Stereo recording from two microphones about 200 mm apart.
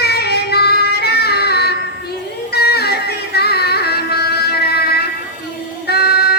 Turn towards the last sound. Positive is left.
turn(degrees=55)  # may be behind; listen again after turning